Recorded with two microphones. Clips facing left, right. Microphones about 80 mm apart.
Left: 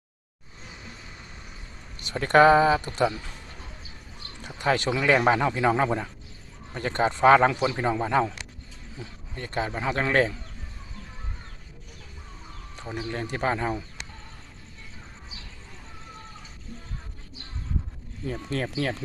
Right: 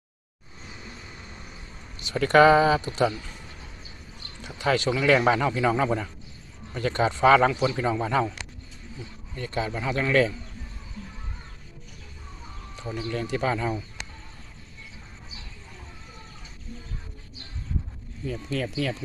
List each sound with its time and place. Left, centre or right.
2.0 s speech: left
4.4 s speech: left
12.7 s a sound: left
13.1 s speech: left
18.3 s speech: left